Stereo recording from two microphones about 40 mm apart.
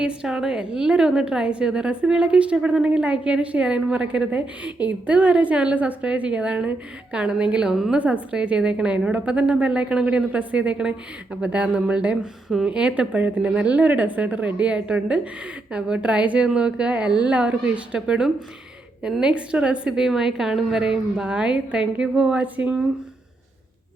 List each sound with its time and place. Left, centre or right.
0.0 s a woman's voice: centre
4.3 s a woman's voice: right
7.9 s speech: right
8.3 s a woman's voice: right
16.6 s a woman's voice: right
17.6 s a woman's voice: right
20.0 s a woman's voice: centre
22.3 s speech: right